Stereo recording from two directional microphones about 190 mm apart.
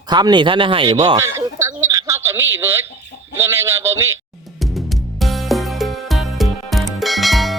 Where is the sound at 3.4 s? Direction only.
10° right (ahead or behind).